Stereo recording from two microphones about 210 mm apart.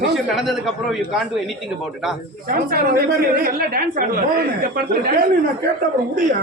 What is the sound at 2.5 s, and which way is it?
A woman's voice, 45° right (ahead or behind).